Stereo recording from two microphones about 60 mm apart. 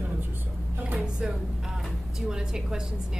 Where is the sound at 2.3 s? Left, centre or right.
Centre.